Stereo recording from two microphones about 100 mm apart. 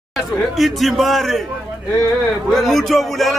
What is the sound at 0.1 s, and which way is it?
Speech, centre (ahead or behind).